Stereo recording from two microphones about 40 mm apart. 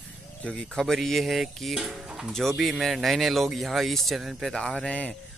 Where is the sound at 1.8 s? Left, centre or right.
Centre.